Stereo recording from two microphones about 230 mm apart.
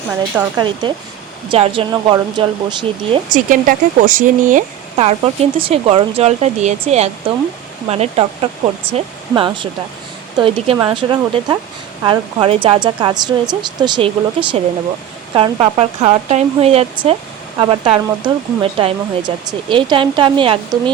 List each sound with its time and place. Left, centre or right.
0.1 s speech: centre
0.6 s speech: centre
3.3 s speech: right; by 14.1 s centre
15.4 s speech: centre